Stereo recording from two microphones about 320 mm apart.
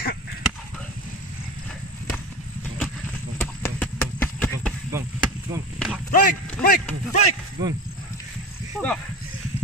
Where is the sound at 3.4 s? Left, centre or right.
Centre.